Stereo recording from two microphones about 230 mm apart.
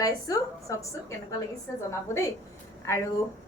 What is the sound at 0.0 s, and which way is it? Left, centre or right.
Speech, centre.